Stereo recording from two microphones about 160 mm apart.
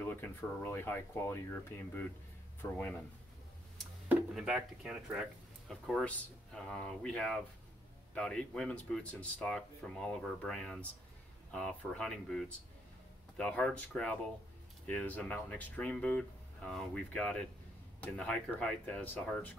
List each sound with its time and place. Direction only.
0.0 s speech: 10° left (ahead or behind)
4.4 s speech: 5° right (ahead or behind)